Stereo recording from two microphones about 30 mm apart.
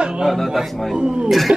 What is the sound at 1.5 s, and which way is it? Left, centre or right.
Speech, right.